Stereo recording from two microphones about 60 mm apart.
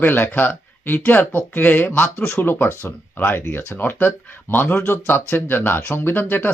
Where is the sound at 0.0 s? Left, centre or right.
Left.